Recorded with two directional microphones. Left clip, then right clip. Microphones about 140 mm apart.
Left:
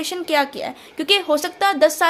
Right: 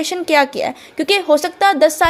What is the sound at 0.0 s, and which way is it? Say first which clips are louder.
Speech: right 5 dB; 40° right (ahead or behind).